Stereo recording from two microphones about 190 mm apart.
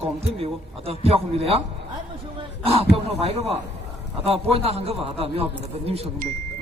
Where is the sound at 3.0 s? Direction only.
30° right (ahead or behind).